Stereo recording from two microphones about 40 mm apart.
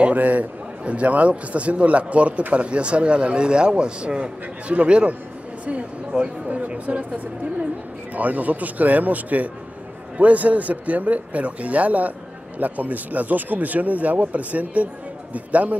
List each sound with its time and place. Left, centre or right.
0.1 s a man's voice: right
6.4 s a man's voice: right
8.1 s a man's voice: right